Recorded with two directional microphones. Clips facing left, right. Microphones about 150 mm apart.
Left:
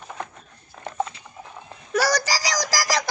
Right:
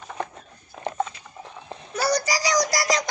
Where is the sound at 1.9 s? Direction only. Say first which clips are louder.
Left 1 dB; 90° left.